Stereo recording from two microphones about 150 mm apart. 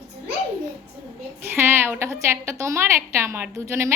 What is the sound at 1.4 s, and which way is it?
A woman's voice, 15° right (ahead or behind).